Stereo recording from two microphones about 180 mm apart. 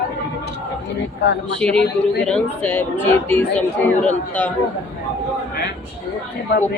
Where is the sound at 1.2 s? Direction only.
80° left.